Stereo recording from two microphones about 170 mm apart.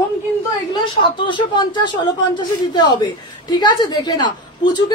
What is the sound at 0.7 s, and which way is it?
Speech, 25° left (ahead or behind).